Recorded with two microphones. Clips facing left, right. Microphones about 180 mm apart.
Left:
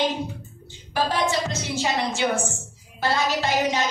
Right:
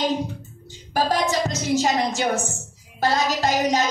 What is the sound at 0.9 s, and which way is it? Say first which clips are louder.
A woman's voice: right 2 dB; 40° right (ahead or behind).